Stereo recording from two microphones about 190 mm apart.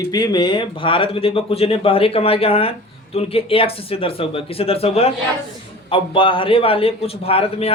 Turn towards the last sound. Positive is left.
turn(degrees=30)  # may be behind; listen again after turning